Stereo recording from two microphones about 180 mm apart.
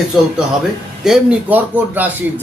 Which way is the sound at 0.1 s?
Centre (ahead or behind).